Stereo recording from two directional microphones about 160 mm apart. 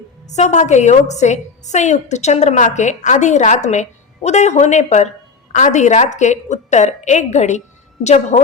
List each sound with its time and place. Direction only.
0.3 s a woman's voice: 45° left (ahead or behind)